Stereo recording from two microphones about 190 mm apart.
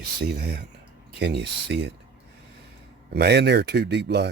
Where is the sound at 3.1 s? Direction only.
60° right (ahead or behind).